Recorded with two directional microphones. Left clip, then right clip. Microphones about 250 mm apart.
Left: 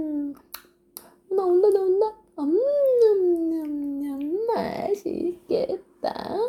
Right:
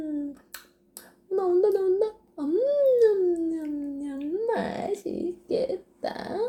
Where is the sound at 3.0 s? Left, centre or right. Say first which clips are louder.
Left 2 dB; left.